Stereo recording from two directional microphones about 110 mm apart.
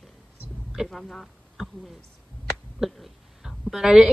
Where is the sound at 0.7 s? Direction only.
Centre (ahead or behind).